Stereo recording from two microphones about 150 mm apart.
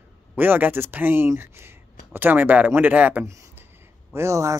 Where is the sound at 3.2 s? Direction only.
20° right (ahead or behind).